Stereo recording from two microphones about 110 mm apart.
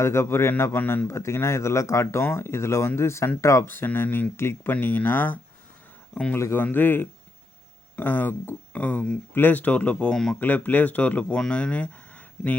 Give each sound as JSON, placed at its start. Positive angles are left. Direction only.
{"t": 0.0, "sound": "speech", "side_deg": 25}